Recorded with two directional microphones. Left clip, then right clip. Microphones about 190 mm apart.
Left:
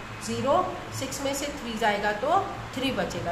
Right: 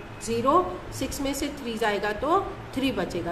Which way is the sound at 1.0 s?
20° right (ahead or behind).